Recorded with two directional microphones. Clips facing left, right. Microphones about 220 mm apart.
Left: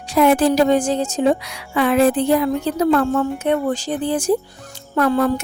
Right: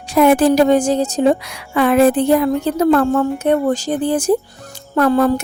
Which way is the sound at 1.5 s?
50° right (ahead or behind).